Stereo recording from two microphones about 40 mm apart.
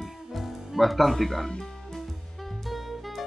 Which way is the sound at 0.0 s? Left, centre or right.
Centre.